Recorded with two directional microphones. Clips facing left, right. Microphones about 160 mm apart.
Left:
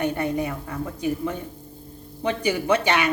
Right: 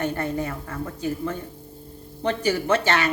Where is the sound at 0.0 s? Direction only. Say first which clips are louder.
Left 2 dB; 15° left (ahead or behind).